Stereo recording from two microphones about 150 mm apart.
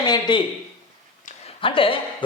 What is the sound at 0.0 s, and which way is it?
Speech, 30° left (ahead or behind).